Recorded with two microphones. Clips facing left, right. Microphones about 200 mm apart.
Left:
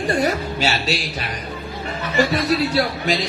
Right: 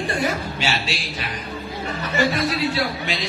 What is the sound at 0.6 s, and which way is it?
Speech, 40° left (ahead or behind).